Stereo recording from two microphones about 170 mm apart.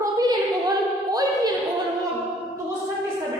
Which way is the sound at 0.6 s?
20° right (ahead or behind).